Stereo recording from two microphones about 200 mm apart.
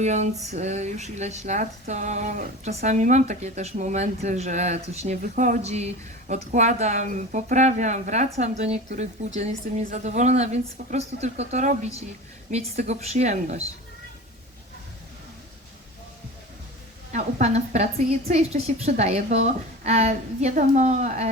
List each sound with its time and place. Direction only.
0.0 s speech: 35° right (ahead or behind)
17.1 s speech: 35° right (ahead or behind)